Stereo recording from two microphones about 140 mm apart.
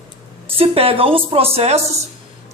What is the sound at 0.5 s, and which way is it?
Speech, 45° right (ahead or behind).